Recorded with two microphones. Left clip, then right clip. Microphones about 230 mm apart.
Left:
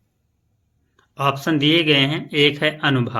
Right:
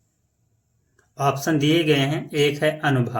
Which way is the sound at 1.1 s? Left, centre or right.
Left.